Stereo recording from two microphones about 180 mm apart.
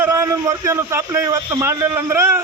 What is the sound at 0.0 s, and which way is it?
A man's voice, 15° right (ahead or behind).